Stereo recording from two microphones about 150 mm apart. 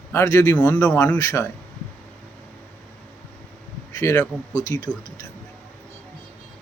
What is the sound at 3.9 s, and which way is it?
A man's voice, 20° left (ahead or behind).